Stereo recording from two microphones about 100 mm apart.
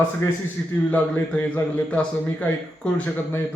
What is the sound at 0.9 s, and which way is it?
A man's voice, 15° left (ahead or behind).